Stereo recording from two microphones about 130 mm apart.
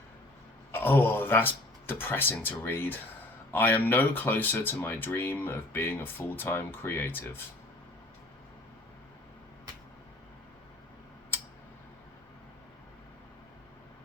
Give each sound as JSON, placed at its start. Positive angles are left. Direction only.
{"t": 0.7, "sound": "speech", "side_deg": 15}